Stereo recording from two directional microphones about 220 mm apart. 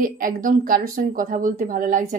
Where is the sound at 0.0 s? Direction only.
40° right (ahead or behind).